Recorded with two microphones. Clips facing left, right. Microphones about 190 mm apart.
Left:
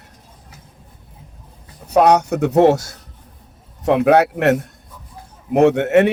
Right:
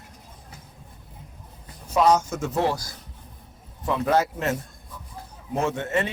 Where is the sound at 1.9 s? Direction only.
65° left (ahead or behind).